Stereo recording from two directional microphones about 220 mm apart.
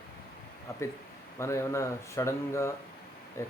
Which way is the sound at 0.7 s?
15° left (ahead or behind).